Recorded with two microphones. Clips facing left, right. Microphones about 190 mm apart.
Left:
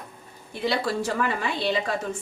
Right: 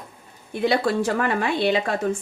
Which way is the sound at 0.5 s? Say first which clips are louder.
Right 5 dB; 55° right (ahead or behind).